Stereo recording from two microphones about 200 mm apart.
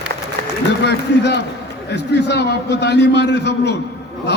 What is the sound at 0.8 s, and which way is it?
A man's voice, 60° left (ahead or behind).